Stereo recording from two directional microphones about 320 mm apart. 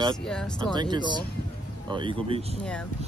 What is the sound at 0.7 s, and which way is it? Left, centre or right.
Speech, centre.